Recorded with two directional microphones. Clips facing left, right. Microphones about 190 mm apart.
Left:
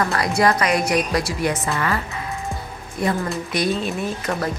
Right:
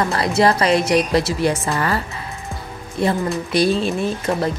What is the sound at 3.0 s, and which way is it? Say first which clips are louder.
A woman's voice: right 3 dB; 30° right (ahead or behind).